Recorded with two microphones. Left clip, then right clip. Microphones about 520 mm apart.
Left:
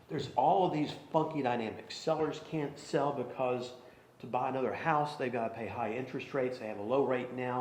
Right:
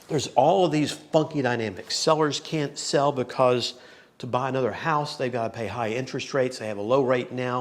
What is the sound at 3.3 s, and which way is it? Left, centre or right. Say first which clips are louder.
Speech: right 12 dB; right.